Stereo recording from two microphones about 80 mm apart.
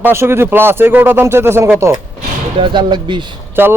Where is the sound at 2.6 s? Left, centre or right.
Right.